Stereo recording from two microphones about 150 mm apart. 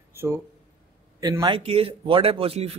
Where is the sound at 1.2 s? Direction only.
25° right (ahead or behind).